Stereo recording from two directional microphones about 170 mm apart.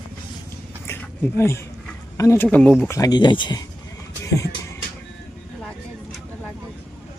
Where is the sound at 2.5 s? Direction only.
5° left (ahead or behind).